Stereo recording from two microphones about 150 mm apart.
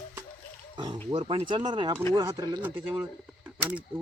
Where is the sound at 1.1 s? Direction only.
40° right (ahead or behind).